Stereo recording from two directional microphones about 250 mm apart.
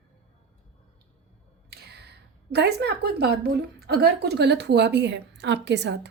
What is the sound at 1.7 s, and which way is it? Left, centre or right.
A woman's voice, right.